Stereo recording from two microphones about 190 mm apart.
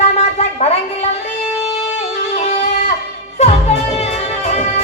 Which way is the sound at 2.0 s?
35° left (ahead or behind).